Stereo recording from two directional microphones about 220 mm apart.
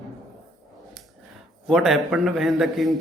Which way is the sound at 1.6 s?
Centre (ahead or behind).